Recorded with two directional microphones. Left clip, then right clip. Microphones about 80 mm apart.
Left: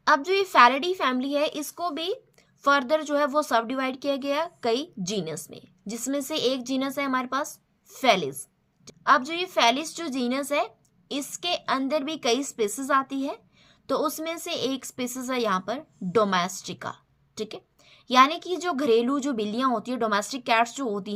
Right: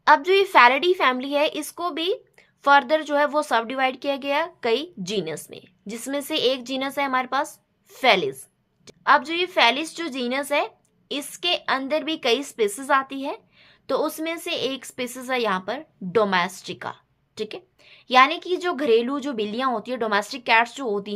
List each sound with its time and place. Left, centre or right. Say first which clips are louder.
0.0 s a woman's voice: right 5 dB; left